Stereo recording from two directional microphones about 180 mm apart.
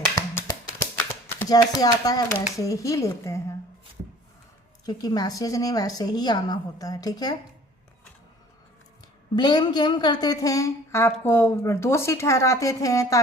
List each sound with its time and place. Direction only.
0.3 s a sound: 15° left (ahead or behind)
1.5 s a woman's voice: 20° left (ahead or behind)
4.9 s a woman's voice: 20° left (ahead or behind)
9.3 s a woman's voice: 25° left (ahead or behind)